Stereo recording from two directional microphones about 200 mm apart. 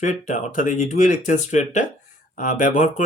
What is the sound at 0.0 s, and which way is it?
Speech, 40° left (ahead or behind).